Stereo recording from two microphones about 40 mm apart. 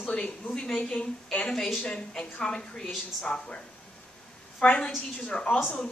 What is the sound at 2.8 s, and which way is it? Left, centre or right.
Speech, centre.